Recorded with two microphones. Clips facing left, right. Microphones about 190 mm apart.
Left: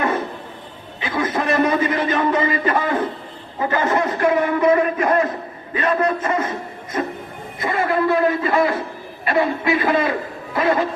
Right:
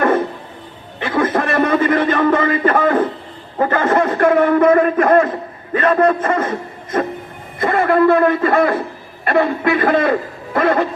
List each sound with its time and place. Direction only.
0.9 s a man's voice: 55° right (ahead or behind)
7.6 s a man's voice: 55° right (ahead or behind)